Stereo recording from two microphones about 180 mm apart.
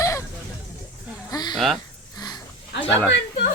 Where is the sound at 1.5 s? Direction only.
Centre (ahead or behind).